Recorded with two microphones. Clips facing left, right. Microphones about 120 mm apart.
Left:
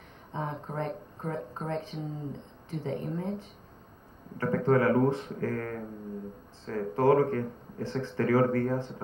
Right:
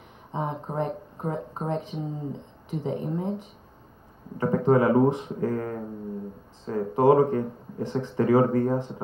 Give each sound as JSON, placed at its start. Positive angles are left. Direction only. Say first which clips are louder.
{"t": 0.3, "sound": "speech", "louder": "right 5 dB", "side_deg": -20}